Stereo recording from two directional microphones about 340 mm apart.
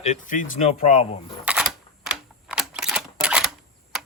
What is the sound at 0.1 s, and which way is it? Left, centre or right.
Speech, left.